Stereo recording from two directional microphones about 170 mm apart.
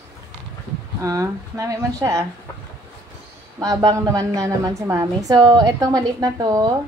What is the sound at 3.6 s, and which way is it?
A woman's voice, 20° right (ahead or behind).